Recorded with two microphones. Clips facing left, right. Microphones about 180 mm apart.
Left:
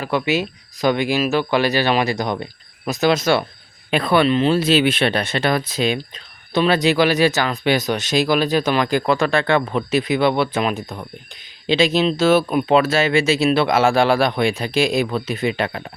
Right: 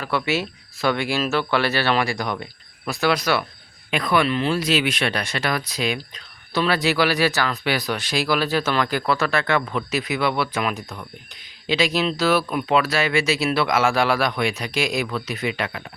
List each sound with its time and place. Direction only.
0.0 s speech: 15° left (ahead or behind)